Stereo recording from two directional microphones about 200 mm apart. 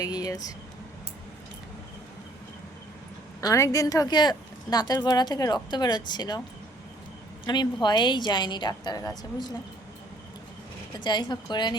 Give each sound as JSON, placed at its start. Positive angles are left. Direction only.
{"t": 0.0, "sound": "speech", "side_deg": 20}
{"t": 3.4, "sound": "speech", "side_deg": 15}
{"t": 7.4, "sound": "speech", "side_deg": 20}
{"t": 11.0, "sound": "speech", "side_deg": 20}